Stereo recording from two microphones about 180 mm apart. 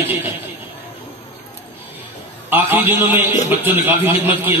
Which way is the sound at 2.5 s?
10° right (ahead or behind).